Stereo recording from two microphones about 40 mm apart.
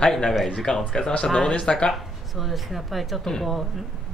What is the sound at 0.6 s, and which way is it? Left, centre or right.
Speech, centre.